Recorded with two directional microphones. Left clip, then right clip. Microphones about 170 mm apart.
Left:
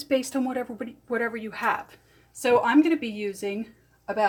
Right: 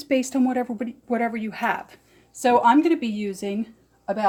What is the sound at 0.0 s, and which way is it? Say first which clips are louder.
Speech: right 3 dB; 25° right (ahead or behind).